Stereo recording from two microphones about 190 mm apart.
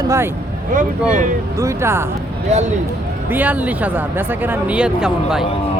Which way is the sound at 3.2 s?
10° right (ahead or behind).